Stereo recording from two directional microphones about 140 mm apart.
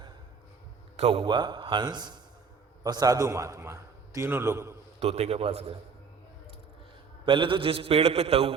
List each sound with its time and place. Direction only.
0.9 s a man's voice: 45° right (ahead or behind); by 4.8 s 20° right (ahead or behind)
4.9 s a man's voice: 50° right (ahead or behind)
7.3 s a man's voice: 35° right (ahead or behind)